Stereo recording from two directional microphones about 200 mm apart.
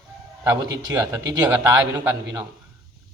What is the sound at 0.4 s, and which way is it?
A man's voice, 15° right (ahead or behind).